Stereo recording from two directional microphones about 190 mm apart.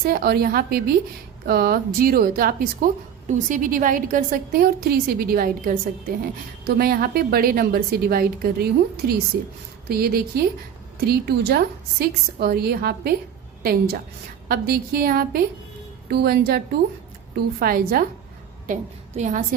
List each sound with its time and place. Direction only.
0.0 s a woman's voice: 50° right (ahead or behind)
18.7 s a woman's voice: 40° right (ahead or behind)